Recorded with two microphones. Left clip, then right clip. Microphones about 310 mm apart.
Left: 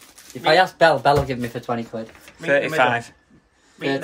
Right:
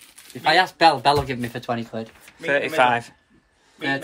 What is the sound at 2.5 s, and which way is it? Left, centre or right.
Speech, centre.